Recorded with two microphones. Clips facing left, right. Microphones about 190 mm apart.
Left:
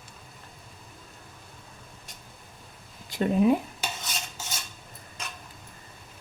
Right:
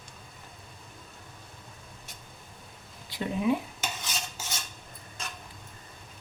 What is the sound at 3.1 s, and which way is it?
Speech, 45° left (ahead or behind).